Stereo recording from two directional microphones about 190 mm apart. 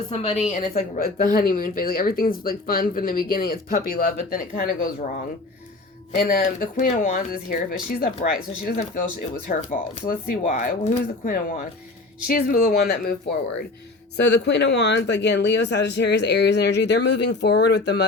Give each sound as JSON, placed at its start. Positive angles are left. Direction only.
{"t": 0.1, "sound": "a woman's voice", "side_deg": 30}
{"t": 0.5, "sound": "speech", "side_deg": 50}
{"t": 6.1, "sound": "speech", "side_deg": 50}
{"t": 14.3, "sound": "speech", "side_deg": 65}